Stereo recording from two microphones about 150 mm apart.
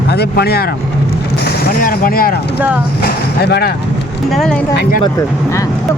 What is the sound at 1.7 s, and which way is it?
Speech, 70° left (ahead or behind).